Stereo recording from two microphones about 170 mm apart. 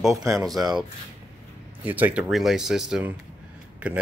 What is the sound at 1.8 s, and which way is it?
Speech, 10° right (ahead or behind).